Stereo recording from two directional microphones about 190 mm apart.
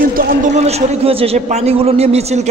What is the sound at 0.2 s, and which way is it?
A man's voice, 45° right (ahead or behind).